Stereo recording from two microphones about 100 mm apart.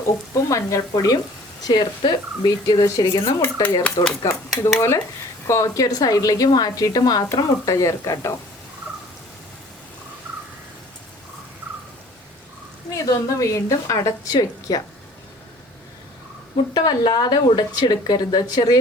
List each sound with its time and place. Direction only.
0.5 s a woman's voice: 35° left (ahead or behind)
1.6 s speech: 45° left (ahead or behind)
3.4 s dishes: 15° left (ahead or behind)
4.2 s a woman's voice: 35° left (ahead or behind)
12.9 s a woman's voice: 35° left (ahead or behind)
16.7 s speech: 45° left (ahead or behind)